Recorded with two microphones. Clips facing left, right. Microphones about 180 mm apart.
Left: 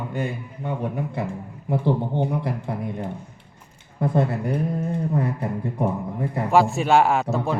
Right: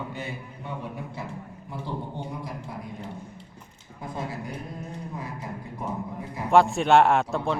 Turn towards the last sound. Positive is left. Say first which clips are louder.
# left 2 dB
turn(degrees=5)  # may be behind; listen again after turning